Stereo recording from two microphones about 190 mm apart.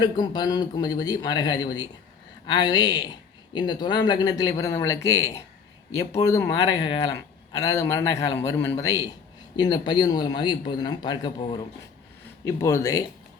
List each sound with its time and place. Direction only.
0.0 s a man's voice: 20° left (ahead or behind)